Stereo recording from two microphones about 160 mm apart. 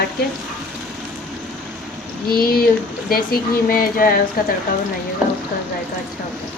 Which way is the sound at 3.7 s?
65° left (ahead or behind).